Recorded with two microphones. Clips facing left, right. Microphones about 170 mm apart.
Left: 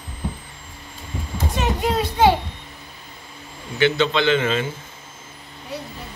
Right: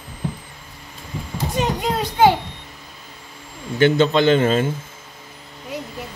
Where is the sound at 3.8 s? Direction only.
45° right (ahead or behind).